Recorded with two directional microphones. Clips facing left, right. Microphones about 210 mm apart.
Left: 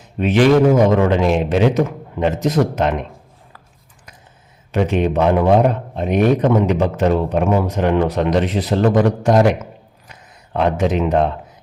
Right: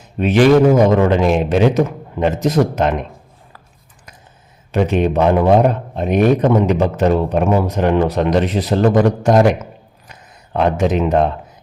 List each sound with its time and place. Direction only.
0.2 s a man's voice: 45° right (ahead or behind)
4.7 s a man's voice: 40° right (ahead or behind)
10.1 s a sound: 45° right (ahead or behind)